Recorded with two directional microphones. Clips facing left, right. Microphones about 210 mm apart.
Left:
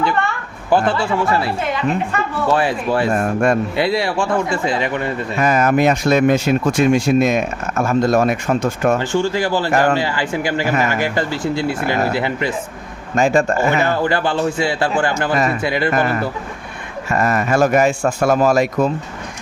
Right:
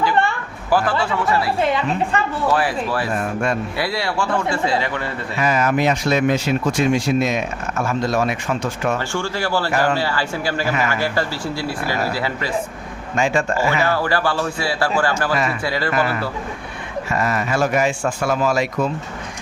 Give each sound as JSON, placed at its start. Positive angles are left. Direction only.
{"t": 0.7, "sound": "a man's voice", "side_deg": 25}
{"t": 2.5, "sound": "a man's voice", "side_deg": 25}
{"t": 3.1, "sound": "speech", "side_deg": 50}
{"t": 3.8, "sound": "a man's voice", "side_deg": 20}
{"t": 5.4, "sound": "speech", "side_deg": 45}
{"t": 9.0, "sound": "a man's voice", "side_deg": 15}
{"t": 13.1, "sound": "a man's voice", "side_deg": 40}
{"t": 13.7, "sound": "a man's voice", "side_deg": 20}
{"t": 15.9, "sound": "speech", "side_deg": 45}